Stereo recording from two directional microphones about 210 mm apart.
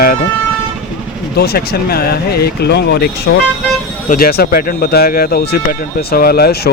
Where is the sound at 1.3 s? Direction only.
50° left (ahead or behind).